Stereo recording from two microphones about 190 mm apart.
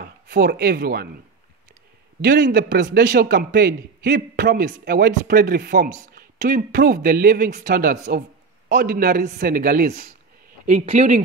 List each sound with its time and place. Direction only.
0.0 s speech: 55° right (ahead or behind)
2.2 s a man's voice: 50° right (ahead or behind)